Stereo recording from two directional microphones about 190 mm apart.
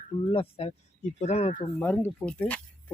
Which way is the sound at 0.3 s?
30° left (ahead or behind).